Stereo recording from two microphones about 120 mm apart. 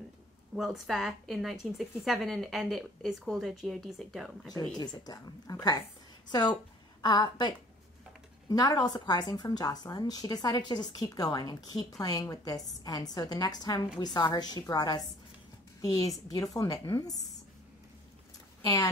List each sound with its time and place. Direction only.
0.6 s a woman's voice: centre (ahead or behind)
4.6 s a woman's voice: 35° left (ahead or behind)